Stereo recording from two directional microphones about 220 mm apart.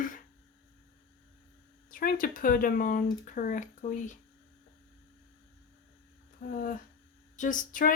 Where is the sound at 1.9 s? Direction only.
40° left (ahead or behind).